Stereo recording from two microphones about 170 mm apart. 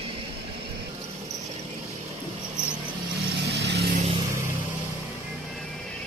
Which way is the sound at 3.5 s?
90° right.